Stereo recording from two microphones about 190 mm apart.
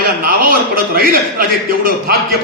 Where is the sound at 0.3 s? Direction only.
50° right (ahead or behind).